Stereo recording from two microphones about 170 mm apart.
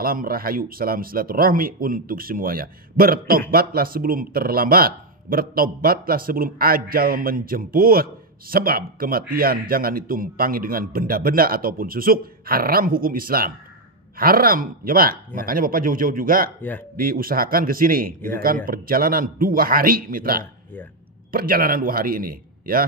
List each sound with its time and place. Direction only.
0.0 s speech: 60° right (ahead or behind)